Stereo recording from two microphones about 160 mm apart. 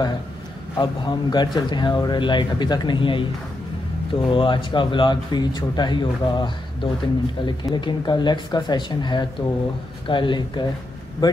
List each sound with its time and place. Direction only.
0.7 s speech: 25° left (ahead or behind)